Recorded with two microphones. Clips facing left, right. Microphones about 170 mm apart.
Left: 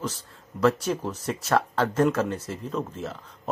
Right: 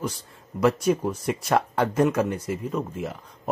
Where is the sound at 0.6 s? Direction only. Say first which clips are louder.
Right 2 dB; 10° right (ahead or behind).